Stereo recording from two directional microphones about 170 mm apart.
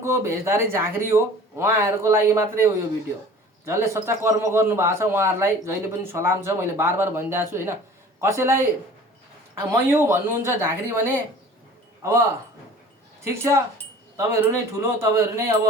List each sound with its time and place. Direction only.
0.0 s a man's voice: 15° right (ahead or behind)
3.7 s a man's voice: 15° right (ahead or behind)
13.2 s a man's voice: 15° right (ahead or behind)